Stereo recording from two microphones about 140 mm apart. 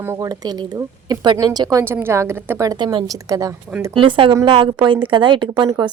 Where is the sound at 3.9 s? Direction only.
35° right (ahead or behind).